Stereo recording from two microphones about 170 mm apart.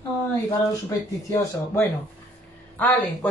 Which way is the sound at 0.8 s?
15° left (ahead or behind).